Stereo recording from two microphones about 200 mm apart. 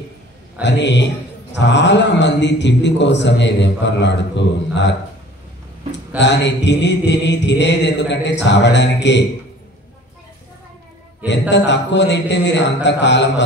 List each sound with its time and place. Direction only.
0.6 s a man's voice: 60° left (ahead or behind)
11.2 s a man's voice: 60° left (ahead or behind)